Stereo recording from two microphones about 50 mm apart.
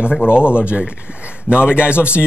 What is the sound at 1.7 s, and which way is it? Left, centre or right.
Speech, right.